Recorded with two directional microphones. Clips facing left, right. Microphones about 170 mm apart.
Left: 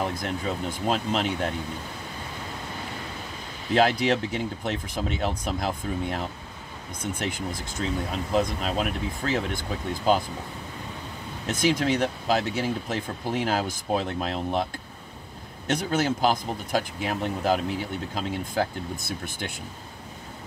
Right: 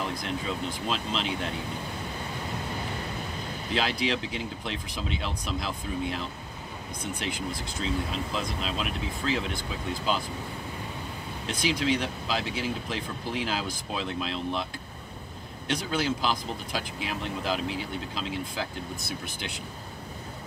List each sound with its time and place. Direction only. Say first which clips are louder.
0.8 s speech: left 7 dB; 45° left (ahead or behind)
3.7 s speech: left 7 dB; 45° left (ahead or behind)
11.4 s speech: left 4 dB; 45° left (ahead or behind)